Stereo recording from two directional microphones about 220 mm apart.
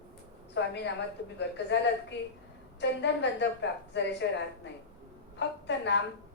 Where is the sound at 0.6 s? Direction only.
55° left (ahead or behind).